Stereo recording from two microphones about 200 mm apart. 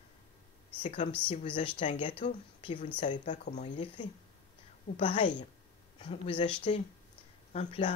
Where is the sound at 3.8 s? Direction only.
25° left (ahead or behind).